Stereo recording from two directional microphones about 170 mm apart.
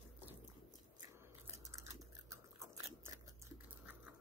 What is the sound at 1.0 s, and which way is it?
Chewing, 20° right (ahead or behind).